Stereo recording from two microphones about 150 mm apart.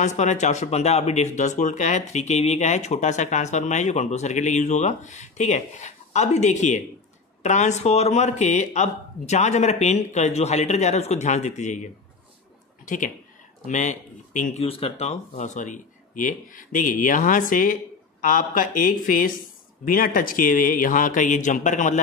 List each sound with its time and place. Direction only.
0.0 s speech: 50° left (ahead or behind)
14.7 s speech: 40° left (ahead or behind)